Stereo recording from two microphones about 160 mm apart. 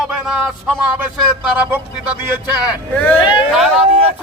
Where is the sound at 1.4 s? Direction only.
10° right (ahead or behind).